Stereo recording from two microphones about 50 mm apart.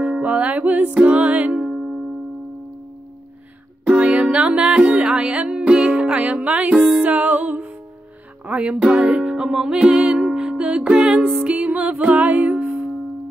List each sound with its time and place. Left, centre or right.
0.2 s music: right
1.6 s music: centre
3.8 s music: right